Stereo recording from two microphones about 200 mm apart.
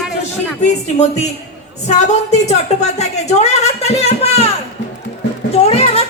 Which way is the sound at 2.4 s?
35° left (ahead or behind).